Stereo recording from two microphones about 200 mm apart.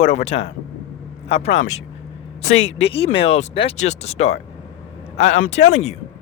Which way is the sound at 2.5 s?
70° left (ahead or behind).